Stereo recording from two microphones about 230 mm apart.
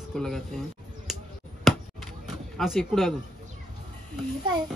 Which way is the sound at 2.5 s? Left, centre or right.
Centre.